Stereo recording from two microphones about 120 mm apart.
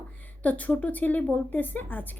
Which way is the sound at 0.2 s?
15° left (ahead or behind).